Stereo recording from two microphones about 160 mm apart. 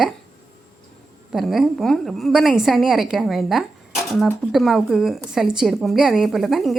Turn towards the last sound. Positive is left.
turn(degrees=0)  # may be behind; listen again after turning